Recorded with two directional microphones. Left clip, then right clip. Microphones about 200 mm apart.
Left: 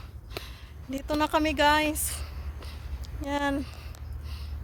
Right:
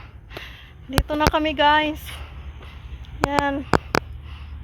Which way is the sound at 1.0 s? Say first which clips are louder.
Right 4 dB; 10° left (ahead or behind).